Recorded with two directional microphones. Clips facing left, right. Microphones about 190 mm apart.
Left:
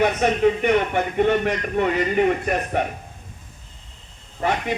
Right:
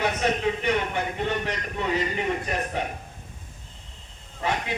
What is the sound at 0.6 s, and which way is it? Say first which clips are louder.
A man's voice: left 6 dB; 55° left (ahead or behind).